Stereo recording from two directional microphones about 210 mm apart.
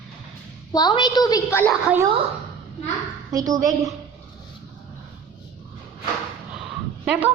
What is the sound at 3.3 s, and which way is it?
Speech, 15° right (ahead or behind).